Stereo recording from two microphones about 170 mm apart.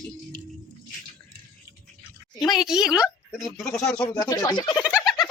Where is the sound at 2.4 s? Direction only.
Centre (ahead or behind).